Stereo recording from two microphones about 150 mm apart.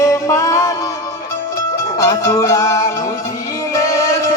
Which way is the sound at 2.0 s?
20° left (ahead or behind).